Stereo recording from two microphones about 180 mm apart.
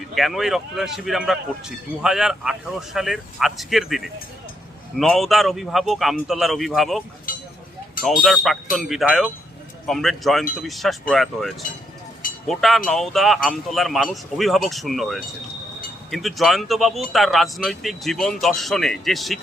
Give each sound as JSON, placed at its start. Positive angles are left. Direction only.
{"t": 0.1, "sound": "speech", "side_deg": 0}
{"t": 7.3, "sound": "a sound", "side_deg": 50}
{"t": 8.0, "sound": "speech", "side_deg": 0}